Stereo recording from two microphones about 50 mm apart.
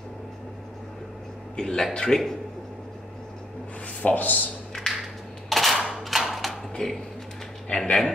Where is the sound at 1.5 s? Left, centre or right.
Centre.